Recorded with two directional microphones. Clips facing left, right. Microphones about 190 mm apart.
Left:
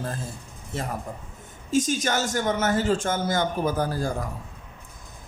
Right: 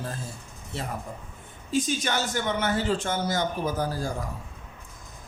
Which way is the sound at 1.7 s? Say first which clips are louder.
Left 3 dB; 45° left (ahead or behind).